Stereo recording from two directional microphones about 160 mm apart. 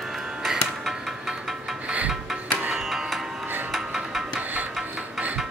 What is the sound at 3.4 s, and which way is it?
Music, 10° right (ahead or behind).